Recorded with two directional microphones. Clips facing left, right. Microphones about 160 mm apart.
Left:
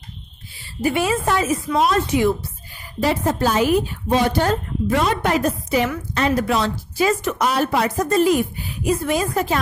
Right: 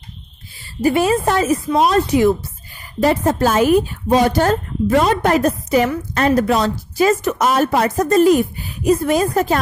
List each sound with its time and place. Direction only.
0.7 s a woman's voice: 40° right (ahead or behind)